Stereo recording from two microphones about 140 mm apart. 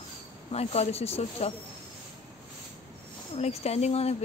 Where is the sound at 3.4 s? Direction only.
50° left (ahead or behind).